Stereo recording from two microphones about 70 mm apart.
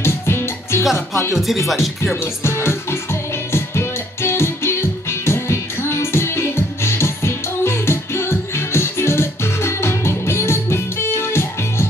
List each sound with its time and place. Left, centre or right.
0.0 s music: left
0.9 s speech: left
1.3 s speech: centre
2.4 s music: left